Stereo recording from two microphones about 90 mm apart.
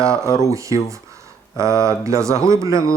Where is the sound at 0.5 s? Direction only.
35° right (ahead or behind).